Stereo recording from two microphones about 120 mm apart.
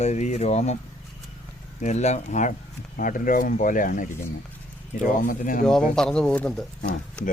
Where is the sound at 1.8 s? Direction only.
75° left (ahead or behind); by 5.5 s 90° left.